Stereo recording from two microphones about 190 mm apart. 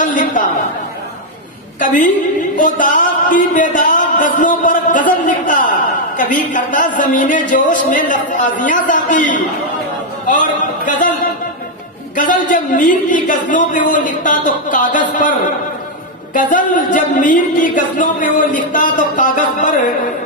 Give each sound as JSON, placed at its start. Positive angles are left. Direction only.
{"t": 0.0, "sound": "speech", "side_deg": 45}
{"t": 1.8, "sound": "speech", "side_deg": 40}
{"t": 12.2, "sound": "speech", "side_deg": 45}
{"t": 16.3, "sound": "speech", "side_deg": 45}